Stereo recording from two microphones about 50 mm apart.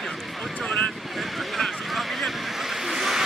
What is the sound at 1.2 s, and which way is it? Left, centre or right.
Vehicle, centre.